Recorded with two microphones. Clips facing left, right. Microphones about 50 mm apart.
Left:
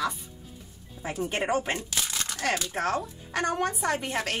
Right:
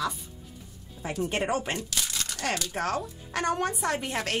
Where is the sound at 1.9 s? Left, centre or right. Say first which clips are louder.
Left 1 dB; left.